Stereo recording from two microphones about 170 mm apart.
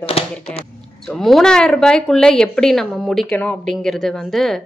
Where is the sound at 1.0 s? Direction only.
Centre (ahead or behind).